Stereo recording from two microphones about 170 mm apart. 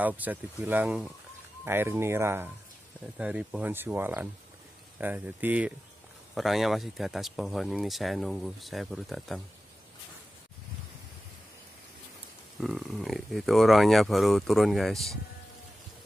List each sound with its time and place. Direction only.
0.0 s speech: 10° right (ahead or behind)
12.5 s speech: centre (ahead or behind)